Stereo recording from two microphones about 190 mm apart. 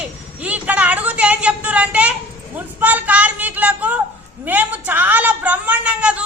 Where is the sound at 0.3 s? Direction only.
5° right (ahead or behind).